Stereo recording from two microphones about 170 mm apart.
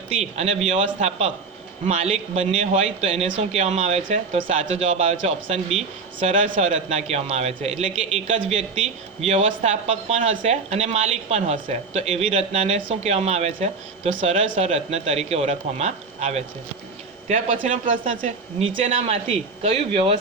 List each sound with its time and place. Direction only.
0.2 s speech: 40° right (ahead or behind)
6.1 s speech: 50° right (ahead or behind)
17.2 s speech: 50° right (ahead or behind)
18.9 s speech: 35° right (ahead or behind)